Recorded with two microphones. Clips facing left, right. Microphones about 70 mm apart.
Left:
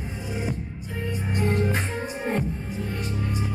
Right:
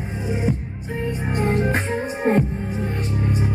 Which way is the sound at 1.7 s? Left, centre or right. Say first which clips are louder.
Right 5 dB; right.